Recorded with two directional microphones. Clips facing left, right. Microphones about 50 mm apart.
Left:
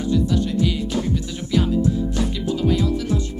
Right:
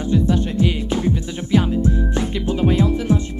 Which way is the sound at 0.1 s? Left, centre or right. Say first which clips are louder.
Right 2 dB; right.